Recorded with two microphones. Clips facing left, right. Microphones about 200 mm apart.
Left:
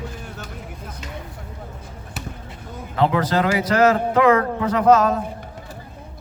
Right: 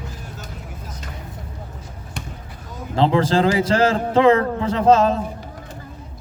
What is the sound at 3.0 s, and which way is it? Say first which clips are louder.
A man's voice: right 2 dB; 30° right (ahead or behind).